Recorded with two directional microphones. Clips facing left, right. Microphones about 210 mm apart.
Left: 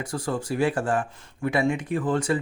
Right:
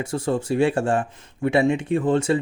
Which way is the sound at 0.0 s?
25° right (ahead or behind).